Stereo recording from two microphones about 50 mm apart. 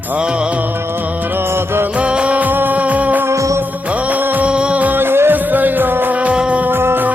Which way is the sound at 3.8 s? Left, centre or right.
Right.